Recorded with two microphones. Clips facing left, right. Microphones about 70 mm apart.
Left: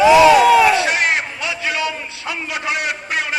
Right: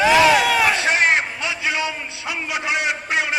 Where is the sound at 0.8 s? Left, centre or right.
Right.